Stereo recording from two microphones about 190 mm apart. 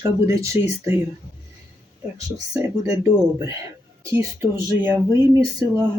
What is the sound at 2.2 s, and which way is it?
Speech, 20° right (ahead or behind).